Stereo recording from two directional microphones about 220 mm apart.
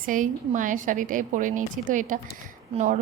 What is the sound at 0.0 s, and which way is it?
A woman's voice, 35° right (ahead or behind).